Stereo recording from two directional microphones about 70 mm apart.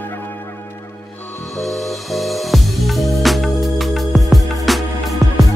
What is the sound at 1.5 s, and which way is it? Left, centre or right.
Music, centre.